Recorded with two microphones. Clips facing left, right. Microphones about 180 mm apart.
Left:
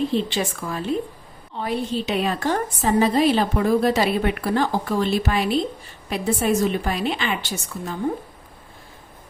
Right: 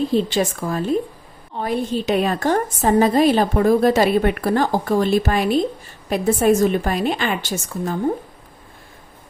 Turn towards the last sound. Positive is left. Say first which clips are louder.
# right 5 dB
turn(degrees=-45)  # may be behind; listen again after turning